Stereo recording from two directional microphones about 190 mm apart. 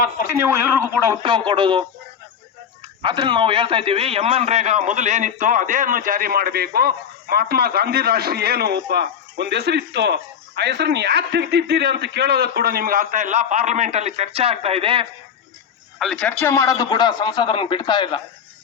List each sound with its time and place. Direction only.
0.3 s a man's voice: 10° right (ahead or behind)
1.5 s speech: 25° right (ahead or behind)
3.0 s a man's voice: 25° right (ahead or behind)
16.0 s a man's voice: 5° left (ahead or behind); by 18.2 s 25° left (ahead or behind)